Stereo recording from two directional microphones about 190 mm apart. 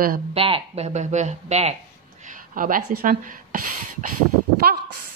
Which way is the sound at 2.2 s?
45° right (ahead or behind).